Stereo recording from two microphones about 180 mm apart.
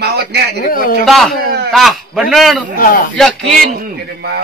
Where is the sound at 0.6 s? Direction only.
50° left (ahead or behind).